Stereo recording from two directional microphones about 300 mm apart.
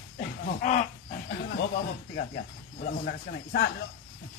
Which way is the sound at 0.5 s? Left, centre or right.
Left.